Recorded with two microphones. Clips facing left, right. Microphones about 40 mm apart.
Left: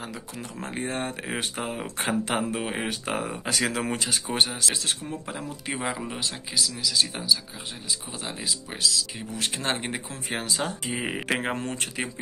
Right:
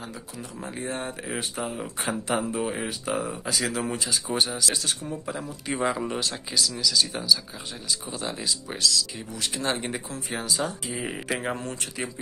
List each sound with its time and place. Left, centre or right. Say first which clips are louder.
0.4 s speech: left 2 dB; left
5.8 s speech: right 6 dB; centre
6.8 s speech: right 1 dB; left
9.3 s speech: even; left